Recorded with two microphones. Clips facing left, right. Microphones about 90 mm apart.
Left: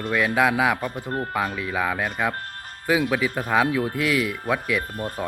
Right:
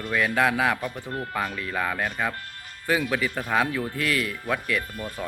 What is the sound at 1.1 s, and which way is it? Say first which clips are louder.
Speech: left 6 dB; 40° left (ahead or behind).